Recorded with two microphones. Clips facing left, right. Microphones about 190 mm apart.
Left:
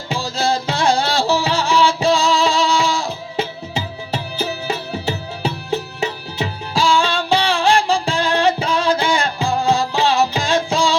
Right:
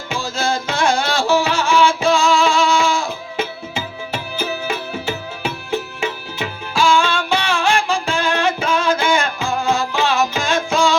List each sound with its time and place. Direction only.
0.1 s music: 35° left (ahead or behind)